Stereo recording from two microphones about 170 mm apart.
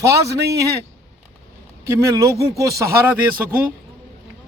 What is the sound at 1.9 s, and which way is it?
Speech, 15° right (ahead or behind).